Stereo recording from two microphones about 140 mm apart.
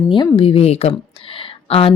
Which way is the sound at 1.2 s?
40° left (ahead or behind).